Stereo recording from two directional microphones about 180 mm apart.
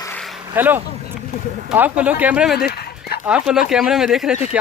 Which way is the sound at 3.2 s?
5° right (ahead or behind).